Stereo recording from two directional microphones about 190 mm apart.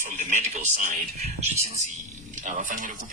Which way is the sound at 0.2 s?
40° right (ahead or behind).